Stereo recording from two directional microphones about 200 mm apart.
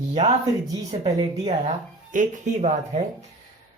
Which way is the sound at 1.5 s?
35° right (ahead or behind).